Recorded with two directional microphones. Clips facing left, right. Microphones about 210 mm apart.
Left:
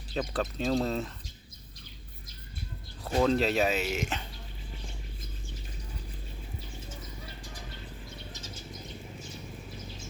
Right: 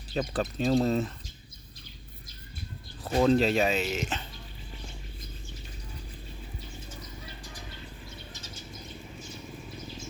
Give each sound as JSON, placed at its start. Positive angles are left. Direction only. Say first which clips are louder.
{"t": 0.1, "sound": "speech", "louder": "right 2 dB", "side_deg": 0}
{"t": 3.2, "sound": "speech", "louder": "right 3 dB", "side_deg": 0}